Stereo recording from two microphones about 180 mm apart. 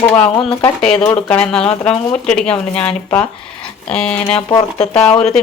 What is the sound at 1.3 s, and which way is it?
Speech, 5° left (ahead or behind).